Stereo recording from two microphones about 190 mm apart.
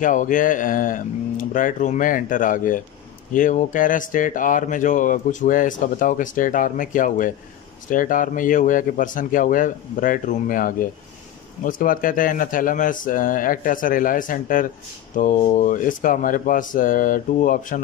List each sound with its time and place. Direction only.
0.0 s speech: 45° left (ahead or behind)